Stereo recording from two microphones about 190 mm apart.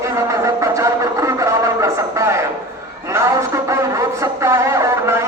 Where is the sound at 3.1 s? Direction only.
15° right (ahead or behind).